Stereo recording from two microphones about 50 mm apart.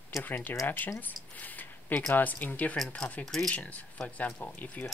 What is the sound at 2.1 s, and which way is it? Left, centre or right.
Speech, left.